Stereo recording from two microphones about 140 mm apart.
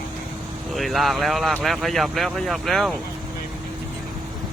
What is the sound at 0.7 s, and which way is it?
Speech, centre (ahead or behind).